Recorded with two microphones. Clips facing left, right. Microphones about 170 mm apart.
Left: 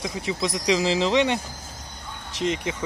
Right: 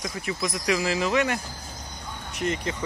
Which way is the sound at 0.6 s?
20° left (ahead or behind).